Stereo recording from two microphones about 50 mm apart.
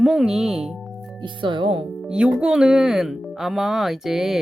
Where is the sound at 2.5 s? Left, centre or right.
Centre.